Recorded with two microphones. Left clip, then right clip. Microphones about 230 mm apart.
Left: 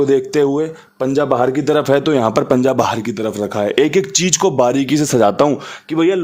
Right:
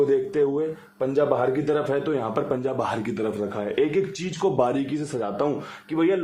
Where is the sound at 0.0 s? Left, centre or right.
Left.